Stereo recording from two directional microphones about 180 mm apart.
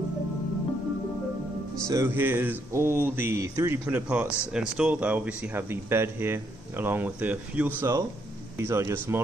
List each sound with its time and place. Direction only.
1.9 s speech: 15° right (ahead or behind)